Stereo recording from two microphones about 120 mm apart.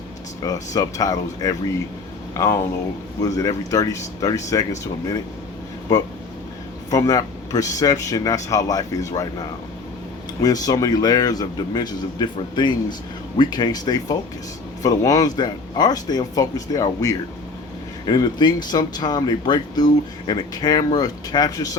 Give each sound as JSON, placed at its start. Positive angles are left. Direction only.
{"t": 0.4, "sound": "speech", "side_deg": 30}
{"t": 6.9, "sound": "speech", "side_deg": 30}